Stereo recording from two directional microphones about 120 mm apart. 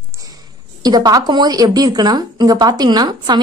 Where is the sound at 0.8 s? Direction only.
35° right (ahead or behind).